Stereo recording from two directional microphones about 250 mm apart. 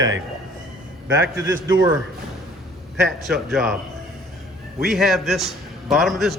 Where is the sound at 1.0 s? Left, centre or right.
Right.